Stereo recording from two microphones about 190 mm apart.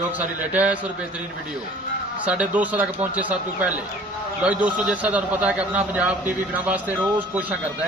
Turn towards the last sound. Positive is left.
turn(degrees=-10)  # may be behind; listen again after turning